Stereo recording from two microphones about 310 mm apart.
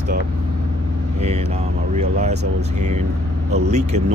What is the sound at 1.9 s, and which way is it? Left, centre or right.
Speech, right.